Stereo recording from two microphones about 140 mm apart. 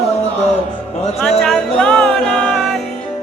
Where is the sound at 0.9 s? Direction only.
50° left (ahead or behind).